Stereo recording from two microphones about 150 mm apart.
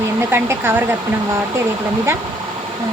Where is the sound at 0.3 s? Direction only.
15° right (ahead or behind).